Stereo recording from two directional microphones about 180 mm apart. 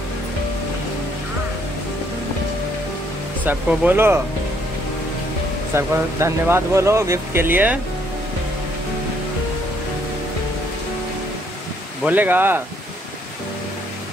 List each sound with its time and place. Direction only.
3.4 s speech: 10° right (ahead or behind)
5.8 s speech: 15° right (ahead or behind)
12.0 s speech: 10° right (ahead or behind)